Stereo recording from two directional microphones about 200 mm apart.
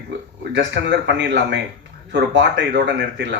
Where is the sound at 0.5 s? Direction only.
60° right (ahead or behind).